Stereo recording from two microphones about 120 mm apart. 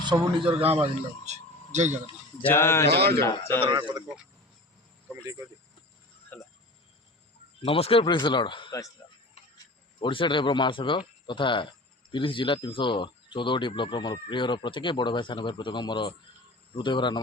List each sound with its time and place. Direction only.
0.0 s a man's voice: 40° right (ahead or behind)
0.6 s speech: 60° right (ahead or behind); by 2.0 s 75° right (ahead or behind)
2.5 s speech: 20° left (ahead or behind)
3.7 s a man's voice: 35° right (ahead or behind)
6.3 s a sound: 10° left (ahead or behind)
7.6 s a man's voice: 50° left (ahead or behind)
9.0 s a sound: 30° left (ahead or behind)
9.4 s a sound: 60° left (ahead or behind)
10.0 s a man's voice: 45° left (ahead or behind)